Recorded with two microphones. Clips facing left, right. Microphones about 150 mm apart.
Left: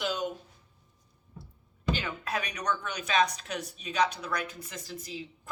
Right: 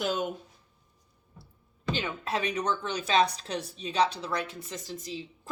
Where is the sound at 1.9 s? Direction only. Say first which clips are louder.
Right 2 dB; 25° right (ahead or behind).